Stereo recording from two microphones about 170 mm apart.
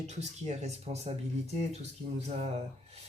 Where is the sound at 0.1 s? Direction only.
40° right (ahead or behind).